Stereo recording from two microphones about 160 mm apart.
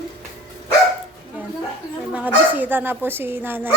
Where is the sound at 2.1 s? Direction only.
10° right (ahead or behind).